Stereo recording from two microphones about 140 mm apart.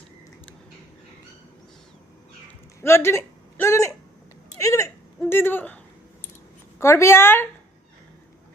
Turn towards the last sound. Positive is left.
turn(degrees=15)  # may be behind; listen again after turning